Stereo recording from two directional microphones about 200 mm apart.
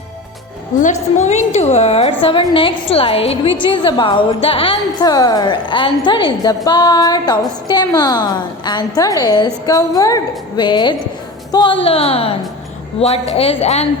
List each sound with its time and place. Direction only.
0.8 s a woman's voice: 35° left (ahead or behind)